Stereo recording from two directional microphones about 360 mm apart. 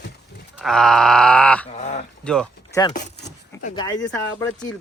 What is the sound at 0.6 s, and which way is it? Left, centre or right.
A man's voice, centre.